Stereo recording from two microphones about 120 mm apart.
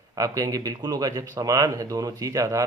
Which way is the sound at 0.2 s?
30° right (ahead or behind).